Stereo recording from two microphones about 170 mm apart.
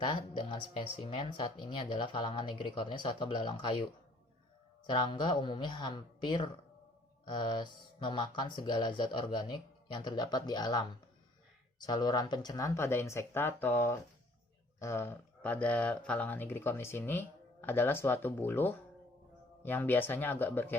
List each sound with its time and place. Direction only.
0.0 s speech: 25° left (ahead or behind)
4.9 s speech: 30° left (ahead or behind); by 20.7 s 10° left (ahead or behind)